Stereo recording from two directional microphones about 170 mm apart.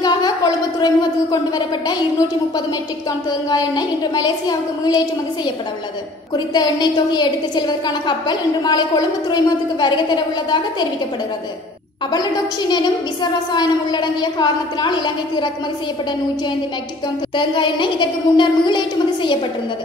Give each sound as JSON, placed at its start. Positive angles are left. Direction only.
{"t": 0.0, "sound": "a sound", "side_deg": 25}
{"t": 0.7, "sound": "a woman's voice", "side_deg": 25}
{"t": 3.3, "sound": "a woman's voice", "side_deg": 25}
{"t": 12.1, "sound": "a woman's voice", "side_deg": 25}
{"t": 17.4, "sound": "a woman's voice", "side_deg": 30}